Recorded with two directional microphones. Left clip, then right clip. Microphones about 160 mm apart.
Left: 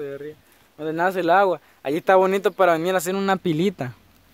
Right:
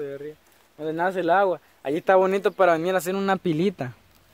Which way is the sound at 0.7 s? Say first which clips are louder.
Left 3 dB; 20° left (ahead or behind).